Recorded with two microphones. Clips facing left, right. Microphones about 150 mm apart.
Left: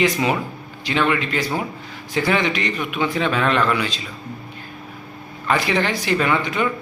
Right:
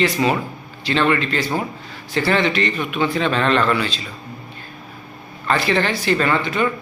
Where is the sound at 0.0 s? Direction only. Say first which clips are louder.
Right 1 dB; 15° left (ahead or behind).